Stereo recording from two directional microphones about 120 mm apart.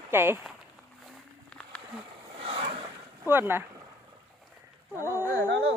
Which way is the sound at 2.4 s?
50° right (ahead or behind).